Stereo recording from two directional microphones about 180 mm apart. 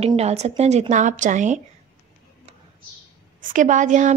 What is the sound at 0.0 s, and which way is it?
A woman's voice, 35° right (ahead or behind).